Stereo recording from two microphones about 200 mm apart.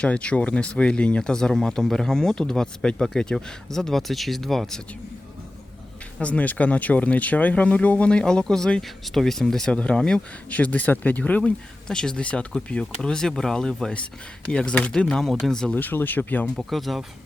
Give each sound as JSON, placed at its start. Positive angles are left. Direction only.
{"t": 0.0, "sound": "speech", "side_deg": 5}
{"t": 6.1, "sound": "speech", "side_deg": 5}